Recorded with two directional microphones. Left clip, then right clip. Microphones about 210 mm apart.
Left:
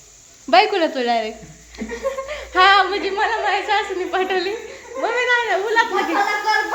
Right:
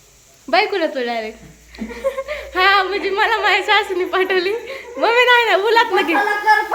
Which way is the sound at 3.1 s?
25° right (ahead or behind).